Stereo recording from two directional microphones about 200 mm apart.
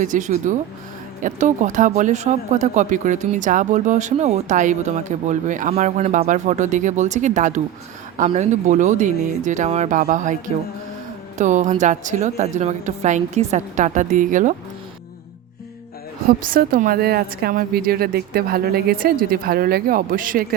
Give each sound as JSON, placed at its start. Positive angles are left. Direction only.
{"t": 0.0, "sound": "speech", "side_deg": -40}
{"t": 16.5, "sound": "a woman's voice", "side_deg": -45}